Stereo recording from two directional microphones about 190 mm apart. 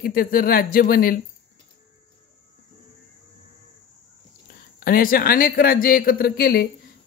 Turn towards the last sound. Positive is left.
turn(degrees=55)  # may be behind; listen again after turning